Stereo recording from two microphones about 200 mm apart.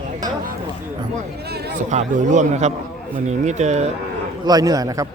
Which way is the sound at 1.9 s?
40° right (ahead or behind).